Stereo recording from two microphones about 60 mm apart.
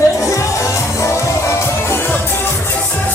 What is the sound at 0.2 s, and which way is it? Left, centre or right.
Music, left.